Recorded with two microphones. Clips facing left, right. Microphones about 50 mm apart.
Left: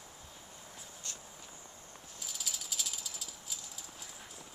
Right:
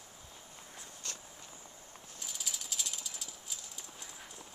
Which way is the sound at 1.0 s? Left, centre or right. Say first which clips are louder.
Right 2 dB; right.